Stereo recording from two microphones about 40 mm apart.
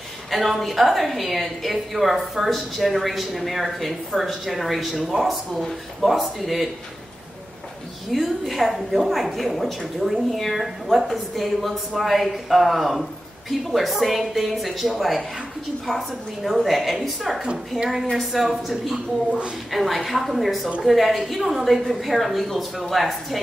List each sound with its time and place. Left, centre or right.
0.3 s a woman's voice: centre
8.1 s a woman's voice: centre
16.4 s a woman's voice: centre